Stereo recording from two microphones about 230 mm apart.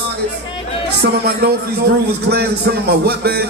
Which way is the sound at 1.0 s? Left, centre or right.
Right.